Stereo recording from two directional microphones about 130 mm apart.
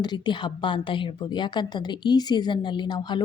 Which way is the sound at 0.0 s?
35° left (ahead or behind).